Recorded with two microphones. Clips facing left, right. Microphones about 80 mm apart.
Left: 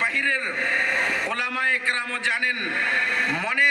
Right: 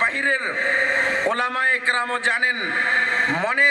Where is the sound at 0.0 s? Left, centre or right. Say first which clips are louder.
Right 3 dB; right.